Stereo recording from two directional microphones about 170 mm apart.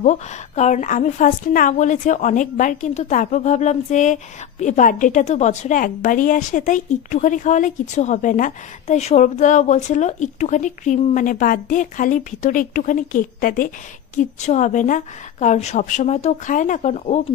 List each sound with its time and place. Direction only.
0.0 s a woman's voice: 45° left (ahead or behind)